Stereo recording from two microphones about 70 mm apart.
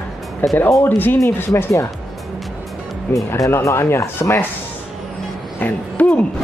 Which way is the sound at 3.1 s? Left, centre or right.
Left.